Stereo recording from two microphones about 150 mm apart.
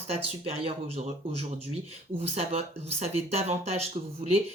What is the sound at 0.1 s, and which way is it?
Speech, 40° right (ahead or behind).